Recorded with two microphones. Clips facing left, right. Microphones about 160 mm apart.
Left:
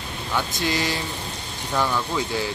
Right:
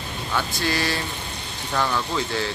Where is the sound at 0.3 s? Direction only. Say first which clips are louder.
Even; 15° left (ahead or behind).